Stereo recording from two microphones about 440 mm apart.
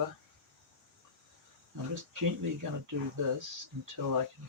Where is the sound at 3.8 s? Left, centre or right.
Right.